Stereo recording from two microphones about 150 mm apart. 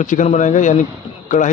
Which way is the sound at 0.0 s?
55° left (ahead or behind).